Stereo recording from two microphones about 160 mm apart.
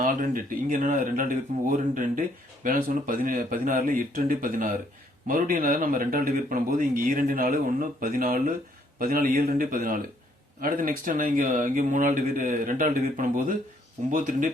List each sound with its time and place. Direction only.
0.0 s speech: 60° right (ahead or behind)